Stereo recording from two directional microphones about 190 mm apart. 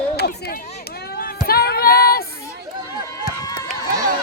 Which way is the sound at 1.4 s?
55° left (ahead or behind).